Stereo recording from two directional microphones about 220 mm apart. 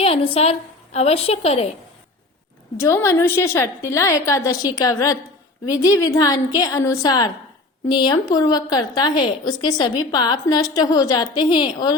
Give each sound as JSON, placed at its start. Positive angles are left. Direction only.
{"t": 0.0, "sound": "a woman's voice", "side_deg": 25}
{"t": 2.7, "sound": "a woman's voice", "side_deg": 10}